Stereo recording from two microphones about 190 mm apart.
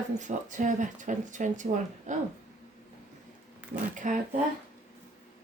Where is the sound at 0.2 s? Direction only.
40° right (ahead or behind).